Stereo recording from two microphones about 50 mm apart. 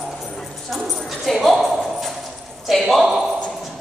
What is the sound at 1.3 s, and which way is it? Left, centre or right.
Speech, centre.